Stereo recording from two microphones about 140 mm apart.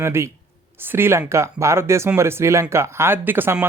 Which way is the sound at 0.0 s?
20° right (ahead or behind).